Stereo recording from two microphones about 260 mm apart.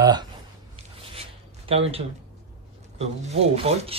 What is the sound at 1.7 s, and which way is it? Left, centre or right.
Speech, right.